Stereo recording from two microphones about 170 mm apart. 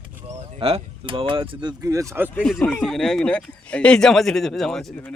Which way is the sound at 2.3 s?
5° left (ahead or behind).